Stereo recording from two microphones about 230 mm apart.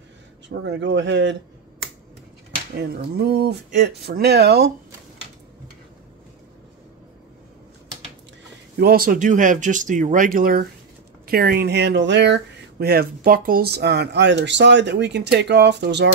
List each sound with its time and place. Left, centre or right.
0.5 s speech: right
2.9 s speech: right
8.7 s speech: right